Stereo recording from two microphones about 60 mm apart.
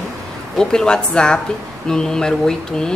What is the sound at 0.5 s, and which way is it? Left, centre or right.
Speech, centre.